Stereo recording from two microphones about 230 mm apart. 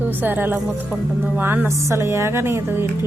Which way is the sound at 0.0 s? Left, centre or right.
Centre.